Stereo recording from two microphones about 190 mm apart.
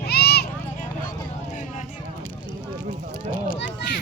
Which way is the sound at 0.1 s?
55° left (ahead or behind).